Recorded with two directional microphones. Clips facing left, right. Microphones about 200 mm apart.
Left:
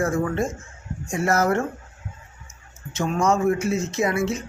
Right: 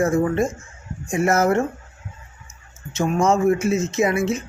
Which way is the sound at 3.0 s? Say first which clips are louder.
Right 3 dB; 25° right (ahead or behind).